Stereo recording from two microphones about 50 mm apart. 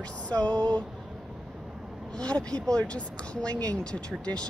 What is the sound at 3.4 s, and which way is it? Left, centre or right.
Speech, left.